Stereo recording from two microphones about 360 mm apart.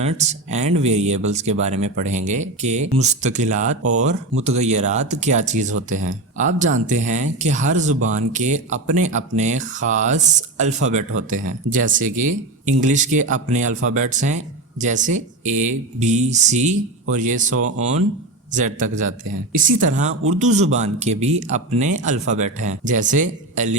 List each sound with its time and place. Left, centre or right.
0.0 s speech: centre
17.5 s speech: right
18.5 s speech: right